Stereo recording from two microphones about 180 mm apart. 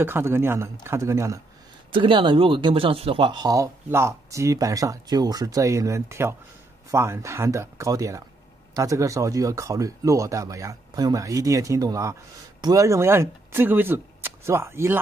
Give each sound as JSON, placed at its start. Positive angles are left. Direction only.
{"t": 0.0, "sound": "a man's voice", "side_deg": -10}
{"t": 1.9, "sound": "a man's voice", "side_deg": -30}